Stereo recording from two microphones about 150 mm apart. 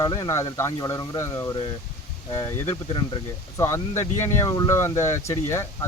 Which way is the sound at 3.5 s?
20° left (ahead or behind).